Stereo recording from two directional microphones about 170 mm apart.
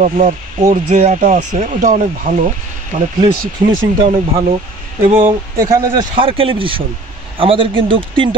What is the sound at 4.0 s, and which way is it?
Speech, 30° right (ahead or behind).